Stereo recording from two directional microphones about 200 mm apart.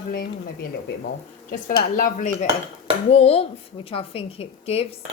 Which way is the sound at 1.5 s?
40° left (ahead or behind).